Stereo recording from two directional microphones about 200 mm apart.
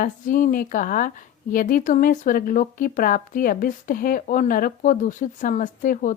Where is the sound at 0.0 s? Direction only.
40° left (ahead or behind).